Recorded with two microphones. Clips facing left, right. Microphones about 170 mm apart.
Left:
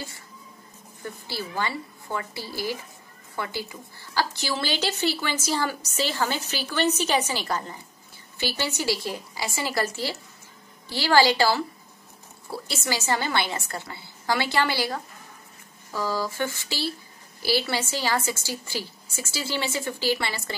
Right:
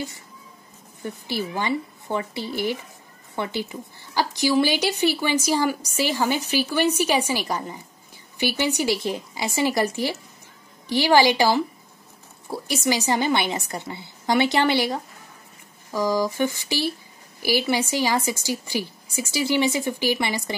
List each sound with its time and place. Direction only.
1.2 s a woman's voice: 20° right (ahead or behind)